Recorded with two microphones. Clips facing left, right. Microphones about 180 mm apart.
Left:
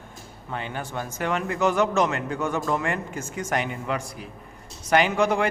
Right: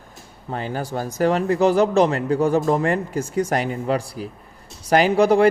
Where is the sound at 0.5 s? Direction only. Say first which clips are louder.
Right 5 dB; 35° right (ahead or behind).